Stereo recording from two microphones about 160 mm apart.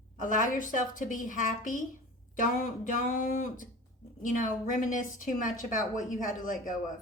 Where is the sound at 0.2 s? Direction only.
55° left (ahead or behind).